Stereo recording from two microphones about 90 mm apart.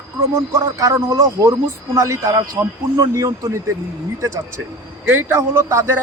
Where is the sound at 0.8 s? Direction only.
35° right (ahead or behind).